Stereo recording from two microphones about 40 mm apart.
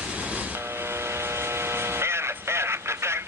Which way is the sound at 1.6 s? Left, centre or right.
Right.